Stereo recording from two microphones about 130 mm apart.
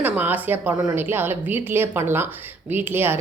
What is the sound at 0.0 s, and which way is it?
A woman's voice, 15° right (ahead or behind).